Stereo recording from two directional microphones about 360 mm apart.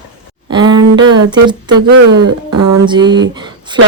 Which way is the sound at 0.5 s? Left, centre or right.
Centre.